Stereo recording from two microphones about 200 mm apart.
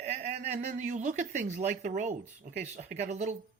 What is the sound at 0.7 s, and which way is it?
Speech, 35° right (ahead or behind).